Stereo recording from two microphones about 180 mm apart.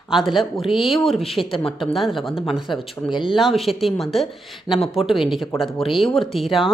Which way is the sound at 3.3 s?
Centre (ahead or behind).